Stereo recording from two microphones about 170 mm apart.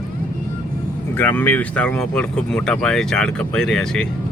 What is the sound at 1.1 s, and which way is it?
Speech, 10° left (ahead or behind).